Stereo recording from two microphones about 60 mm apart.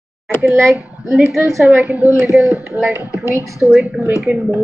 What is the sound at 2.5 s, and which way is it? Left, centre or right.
Speech, right.